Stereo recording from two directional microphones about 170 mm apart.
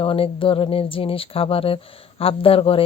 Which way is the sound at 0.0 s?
30° left (ahead or behind).